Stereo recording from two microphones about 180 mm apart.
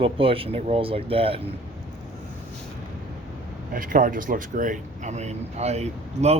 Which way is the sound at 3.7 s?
50° right (ahead or behind).